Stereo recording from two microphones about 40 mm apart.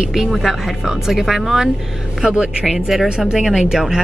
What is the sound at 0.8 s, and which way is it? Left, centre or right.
Speech, centre.